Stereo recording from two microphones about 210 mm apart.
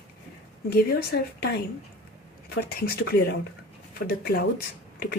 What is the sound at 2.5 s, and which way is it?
Speech, 50° left (ahead or behind).